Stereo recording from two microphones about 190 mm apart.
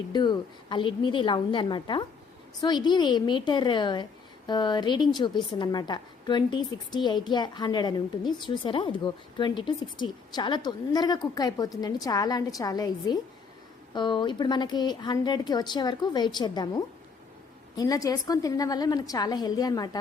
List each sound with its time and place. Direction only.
0.1 s a woman's voice: 25° left (ahead or behind)